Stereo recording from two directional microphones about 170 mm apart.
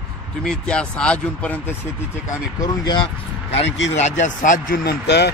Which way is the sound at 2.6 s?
25° left (ahead or behind).